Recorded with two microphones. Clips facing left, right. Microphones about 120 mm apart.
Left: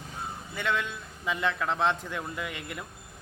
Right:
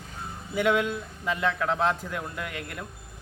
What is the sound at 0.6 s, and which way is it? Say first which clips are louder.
A man's voice: right 7 dB; 10° right (ahead or behind).